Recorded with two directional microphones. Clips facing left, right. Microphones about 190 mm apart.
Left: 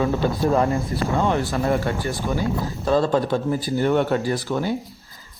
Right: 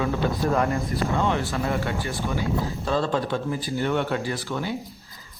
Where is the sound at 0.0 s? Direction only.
30° left (ahead or behind).